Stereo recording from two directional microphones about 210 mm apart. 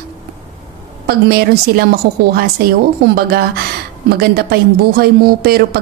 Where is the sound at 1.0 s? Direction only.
50° right (ahead or behind).